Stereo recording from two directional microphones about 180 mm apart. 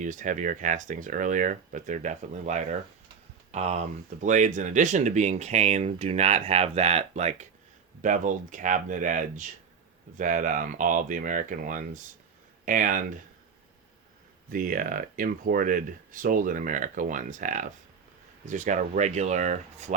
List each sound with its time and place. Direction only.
0.0 s speech: 45° right (ahead or behind)
14.5 s speech: 50° right (ahead or behind)